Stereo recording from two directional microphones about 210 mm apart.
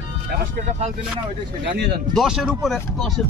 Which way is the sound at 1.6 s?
55° right (ahead or behind).